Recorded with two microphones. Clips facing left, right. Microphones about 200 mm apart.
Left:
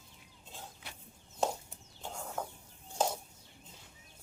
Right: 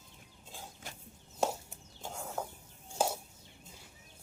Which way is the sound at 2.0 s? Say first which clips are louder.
Right 1 dB; 10° right (ahead or behind).